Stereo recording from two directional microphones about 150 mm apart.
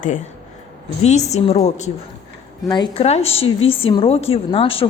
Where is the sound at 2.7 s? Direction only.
35° left (ahead or behind).